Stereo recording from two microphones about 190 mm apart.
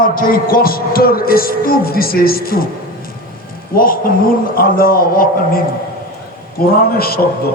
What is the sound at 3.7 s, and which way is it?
A man's voice, 50° left (ahead or behind).